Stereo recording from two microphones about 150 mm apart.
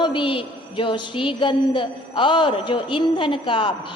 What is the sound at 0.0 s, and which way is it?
A woman's voice, 35° left (ahead or behind).